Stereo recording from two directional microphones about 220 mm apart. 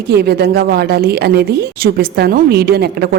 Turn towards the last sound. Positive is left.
turn(degrees=-45)  # may be behind; listen again after turning